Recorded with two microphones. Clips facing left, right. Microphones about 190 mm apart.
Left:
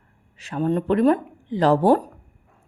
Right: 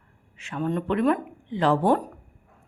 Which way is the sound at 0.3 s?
35° left (ahead or behind).